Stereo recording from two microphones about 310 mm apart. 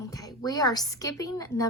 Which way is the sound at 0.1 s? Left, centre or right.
Centre.